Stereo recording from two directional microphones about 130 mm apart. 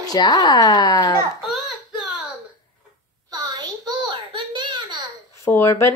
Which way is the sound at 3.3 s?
30° right (ahead or behind).